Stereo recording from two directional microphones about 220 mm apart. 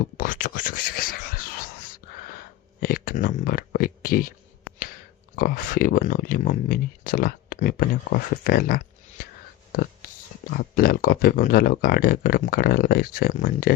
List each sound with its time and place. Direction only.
0.0 s speech: 40° left (ahead or behind)
2.8 s speech: 40° left (ahead or behind)
5.4 s speech: 40° left (ahead or behind)
10.6 s speech: 40° left (ahead or behind)